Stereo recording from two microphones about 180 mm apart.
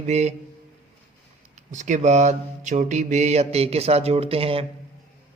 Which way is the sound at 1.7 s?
45° right (ahead or behind).